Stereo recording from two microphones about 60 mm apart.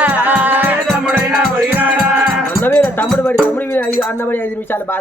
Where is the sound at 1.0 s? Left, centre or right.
Centre.